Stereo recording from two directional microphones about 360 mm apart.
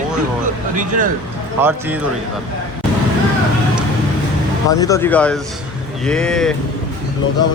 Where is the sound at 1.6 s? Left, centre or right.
Centre.